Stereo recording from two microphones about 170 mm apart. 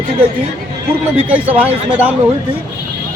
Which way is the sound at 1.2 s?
10° right (ahead or behind).